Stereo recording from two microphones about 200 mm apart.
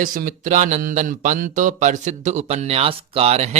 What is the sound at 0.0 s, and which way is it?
Speech, 40° right (ahead or behind).